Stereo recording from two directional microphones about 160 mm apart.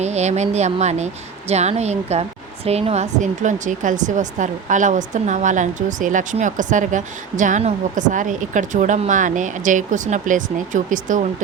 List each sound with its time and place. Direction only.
0.0 s speech: 45° right (ahead or behind)